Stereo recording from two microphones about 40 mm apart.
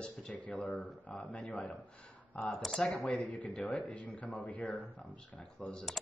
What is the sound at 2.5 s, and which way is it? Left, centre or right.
Speech, centre.